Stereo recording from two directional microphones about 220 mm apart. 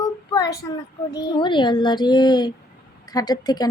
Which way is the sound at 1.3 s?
20° left (ahead or behind).